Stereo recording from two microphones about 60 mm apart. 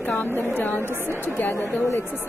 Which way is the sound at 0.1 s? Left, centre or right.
Left.